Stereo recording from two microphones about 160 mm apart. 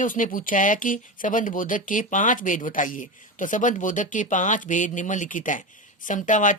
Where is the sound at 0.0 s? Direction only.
55° left (ahead or behind).